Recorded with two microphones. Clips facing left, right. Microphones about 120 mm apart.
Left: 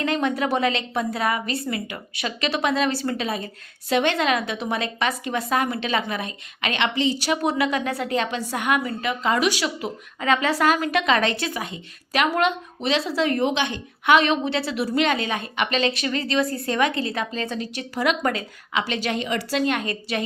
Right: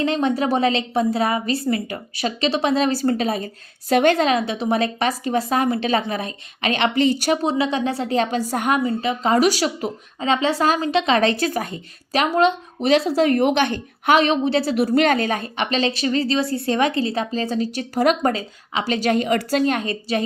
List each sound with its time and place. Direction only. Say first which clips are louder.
0.0 s a woman's voice: right 3 dB; 30° right (ahead or behind)
6.9 s a woman's voice: right 5 dB; 55° right (ahead or behind)
7.4 s a woman's voice: right 2 dB; 25° right (ahead or behind)
8.8 s a woman's voice: right 4 dB; 25° right (ahead or behind)
10.2 s a woman's voice: right 1 dB; 25° right (ahead or behind)
12.8 s a woman's voice: right 6 dB; 45° right (ahead or behind)